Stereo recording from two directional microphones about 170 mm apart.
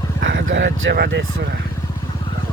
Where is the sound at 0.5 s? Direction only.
90° right.